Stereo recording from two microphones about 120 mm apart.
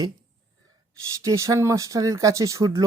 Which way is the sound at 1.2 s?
25° right (ahead or behind).